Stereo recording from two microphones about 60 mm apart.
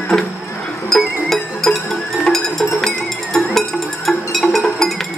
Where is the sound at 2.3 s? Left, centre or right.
Centre.